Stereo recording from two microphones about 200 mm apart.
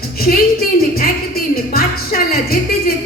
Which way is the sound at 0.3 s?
45° left (ahead or behind).